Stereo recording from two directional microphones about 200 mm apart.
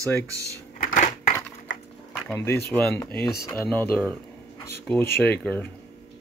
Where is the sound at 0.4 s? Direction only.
40° left (ahead or behind).